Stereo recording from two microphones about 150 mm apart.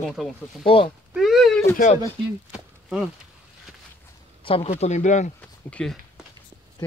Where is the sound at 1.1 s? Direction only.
Centre (ahead or behind).